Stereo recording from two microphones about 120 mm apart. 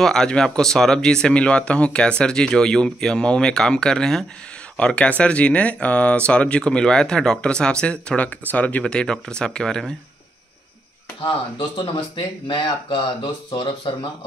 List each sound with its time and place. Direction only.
0.0 s speech: 5° left (ahead or behind)
11.5 s speech: 45° left (ahead or behind)